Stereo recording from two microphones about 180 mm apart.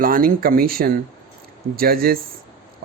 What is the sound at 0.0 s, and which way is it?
Speech, 50° right (ahead or behind).